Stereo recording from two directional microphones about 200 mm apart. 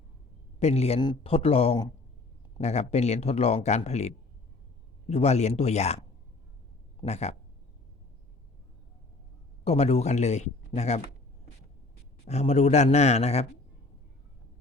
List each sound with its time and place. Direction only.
0.6 s a man's voice: 30° left (ahead or behind)
7.0 s speech: 35° left (ahead or behind)
9.6 s speech: 30° left (ahead or behind)
12.2 s speech: 30° left (ahead or behind)